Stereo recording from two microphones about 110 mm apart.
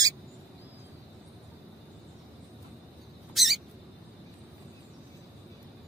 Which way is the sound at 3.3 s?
Centre (ahead or behind).